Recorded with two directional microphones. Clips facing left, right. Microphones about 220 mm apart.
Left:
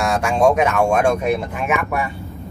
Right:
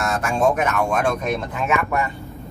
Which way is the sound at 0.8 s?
10° left (ahead or behind).